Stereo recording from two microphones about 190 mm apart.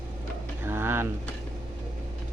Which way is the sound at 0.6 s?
10° right (ahead or behind).